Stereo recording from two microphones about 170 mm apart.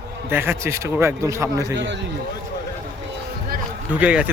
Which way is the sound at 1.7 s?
90° right.